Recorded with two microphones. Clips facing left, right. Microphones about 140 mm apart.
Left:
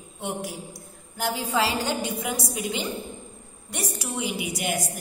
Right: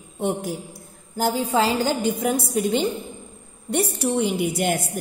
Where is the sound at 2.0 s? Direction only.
50° right (ahead or behind).